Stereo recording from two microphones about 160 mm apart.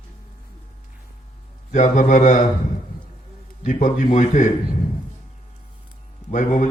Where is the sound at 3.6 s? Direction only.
55° left (ahead or behind).